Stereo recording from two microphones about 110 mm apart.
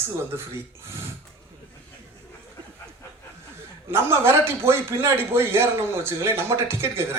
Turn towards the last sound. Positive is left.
turn(degrees=-25)  # may be behind; listen again after turning